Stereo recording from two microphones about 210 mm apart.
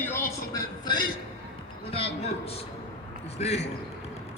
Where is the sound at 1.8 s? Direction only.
25° left (ahead or behind).